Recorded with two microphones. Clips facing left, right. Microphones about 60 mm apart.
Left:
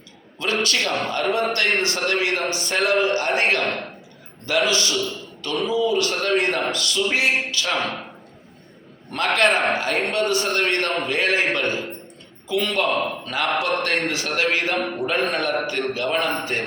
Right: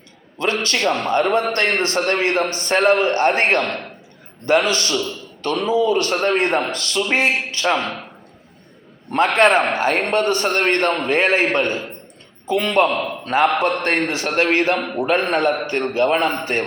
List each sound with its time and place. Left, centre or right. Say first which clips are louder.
0.6 s a man's voice: right 3 dB; right
9.4 s a man's voice: right 4 dB; right